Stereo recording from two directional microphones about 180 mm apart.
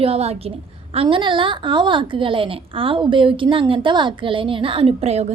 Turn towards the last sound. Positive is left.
turn(degrees=-35)  # may be behind; listen again after turning